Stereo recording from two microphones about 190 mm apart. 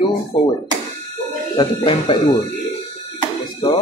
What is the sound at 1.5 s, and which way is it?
Speech, 25° left (ahead or behind).